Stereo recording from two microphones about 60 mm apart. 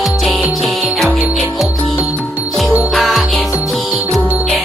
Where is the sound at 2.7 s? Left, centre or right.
Right.